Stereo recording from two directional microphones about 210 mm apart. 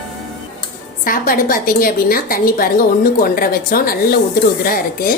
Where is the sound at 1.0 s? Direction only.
40° left (ahead or behind).